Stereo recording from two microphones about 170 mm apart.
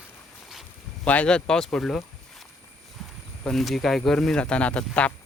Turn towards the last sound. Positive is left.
turn(degrees=5)  # may be behind; listen again after turning